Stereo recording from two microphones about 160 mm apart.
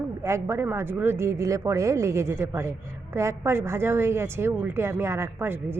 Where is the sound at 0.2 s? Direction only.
15° right (ahead or behind).